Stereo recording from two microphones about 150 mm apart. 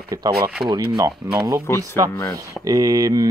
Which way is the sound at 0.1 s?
25° right (ahead or behind).